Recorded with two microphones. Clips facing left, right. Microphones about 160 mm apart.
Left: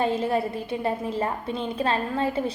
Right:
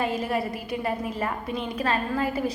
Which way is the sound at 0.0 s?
30° left (ahead or behind).